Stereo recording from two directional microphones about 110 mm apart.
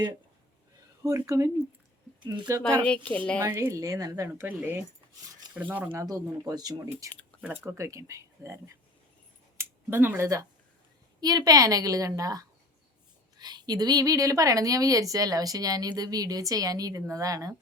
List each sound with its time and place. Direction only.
1.0 s speech: 30° right (ahead or behind)
2.2 s speech: 45° right (ahead or behind)
2.8 s a woman's voice: 10° left (ahead or behind)
3.4 s speech: 30° right (ahead or behind)
4.4 s speech: 20° right (ahead or behind)
6.0 s a woman's voice: 30° right (ahead or behind)
7.4 s speech: 20° right (ahead or behind)
9.6 s a sound: 20° right (ahead or behind)
11.2 s a woman's voice: 35° right (ahead or behind)